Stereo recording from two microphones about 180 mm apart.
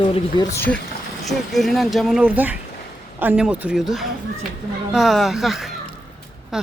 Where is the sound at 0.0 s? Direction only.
30° left (ahead or behind).